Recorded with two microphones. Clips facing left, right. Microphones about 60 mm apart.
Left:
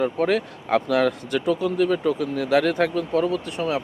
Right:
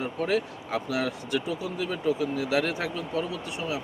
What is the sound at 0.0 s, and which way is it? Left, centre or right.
Speech, left.